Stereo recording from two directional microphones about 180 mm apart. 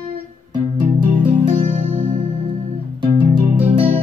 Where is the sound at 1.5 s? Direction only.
40° right (ahead or behind).